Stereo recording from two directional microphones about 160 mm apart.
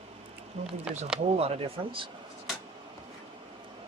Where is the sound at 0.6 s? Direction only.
45° right (ahead or behind).